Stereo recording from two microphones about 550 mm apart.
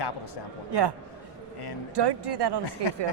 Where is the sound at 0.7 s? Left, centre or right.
Right.